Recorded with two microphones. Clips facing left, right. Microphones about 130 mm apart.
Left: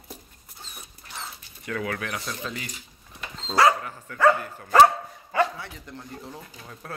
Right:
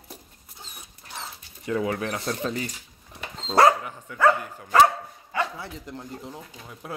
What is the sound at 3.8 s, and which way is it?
Speech, 15° right (ahead or behind).